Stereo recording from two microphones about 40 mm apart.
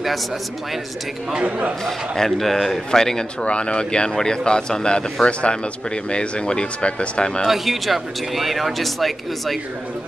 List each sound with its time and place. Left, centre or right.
1.9 s speech: centre
3.4 s speech: left
7.4 s speech: centre